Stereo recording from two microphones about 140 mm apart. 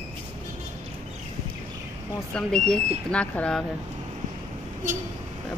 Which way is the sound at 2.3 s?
5° left (ahead or behind).